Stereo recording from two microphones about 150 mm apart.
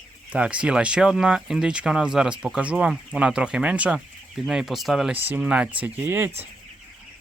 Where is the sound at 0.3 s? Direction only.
10° right (ahead or behind).